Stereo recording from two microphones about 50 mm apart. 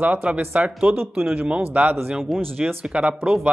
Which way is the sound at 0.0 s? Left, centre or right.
Right.